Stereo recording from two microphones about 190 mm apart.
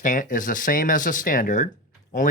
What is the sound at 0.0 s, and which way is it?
Speech, 45° left (ahead or behind).